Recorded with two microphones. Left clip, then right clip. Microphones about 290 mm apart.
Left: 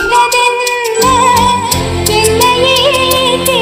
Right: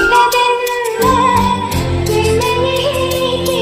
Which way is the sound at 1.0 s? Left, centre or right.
Centre.